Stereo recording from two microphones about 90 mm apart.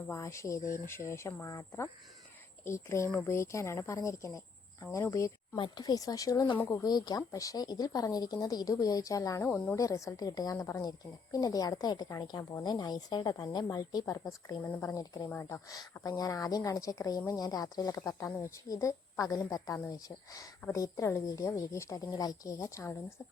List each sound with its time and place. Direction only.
0.1 s a woman's voice: 35° left (ahead or behind)
5.5 s speech: 65° left (ahead or behind)
5.8 s a woman's voice: 40° left (ahead or behind)
9.5 s speech: 10° left (ahead or behind)
9.7 s a woman's voice: 35° left (ahead or behind)
15.4 s speech: 30° left (ahead or behind)
15.7 s a woman's voice: 45° left (ahead or behind)